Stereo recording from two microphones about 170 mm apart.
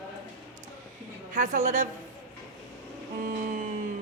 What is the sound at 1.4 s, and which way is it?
Speech, 45° right (ahead or behind).